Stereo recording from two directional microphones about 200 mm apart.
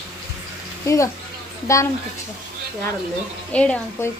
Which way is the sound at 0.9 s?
15° left (ahead or behind).